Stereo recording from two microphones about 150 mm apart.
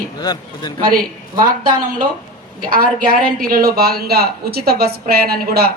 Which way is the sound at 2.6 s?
70° right (ahead or behind).